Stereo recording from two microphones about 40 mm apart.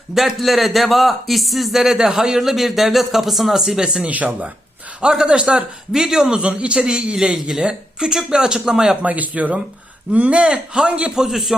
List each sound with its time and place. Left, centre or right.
0.3 s speech: centre
4.1 s speech: right
4.9 s a man's voice: right
5.9 s a man's voice: centre
9.0 s speech: right
10.1 s a man's voice: right
11.1 s speech: centre